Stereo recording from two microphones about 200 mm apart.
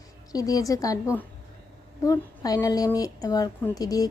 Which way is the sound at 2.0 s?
15° left (ahead or behind).